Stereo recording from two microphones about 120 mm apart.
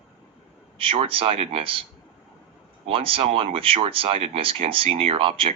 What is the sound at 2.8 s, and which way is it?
Speech, 50° right (ahead or behind).